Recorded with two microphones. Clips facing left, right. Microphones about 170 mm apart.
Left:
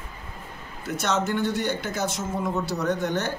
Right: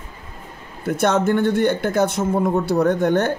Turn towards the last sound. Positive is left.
turn(degrees=-55)  # may be behind; listen again after turning